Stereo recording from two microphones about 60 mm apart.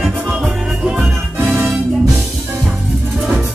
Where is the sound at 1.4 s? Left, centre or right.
Right.